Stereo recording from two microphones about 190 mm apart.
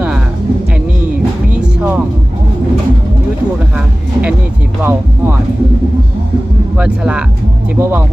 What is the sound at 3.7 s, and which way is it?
Speech, 5° right (ahead or behind).